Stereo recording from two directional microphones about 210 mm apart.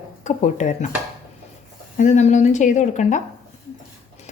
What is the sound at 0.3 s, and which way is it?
Speech, 35° left (ahead or behind).